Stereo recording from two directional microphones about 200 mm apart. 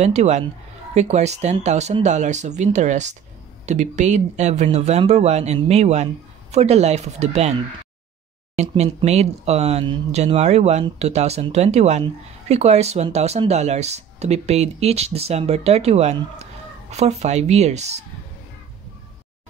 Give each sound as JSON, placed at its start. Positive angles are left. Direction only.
{"t": 0.0, "sound": "speech", "side_deg": -35}